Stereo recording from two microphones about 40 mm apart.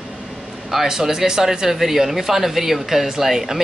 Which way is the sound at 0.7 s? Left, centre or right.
Centre.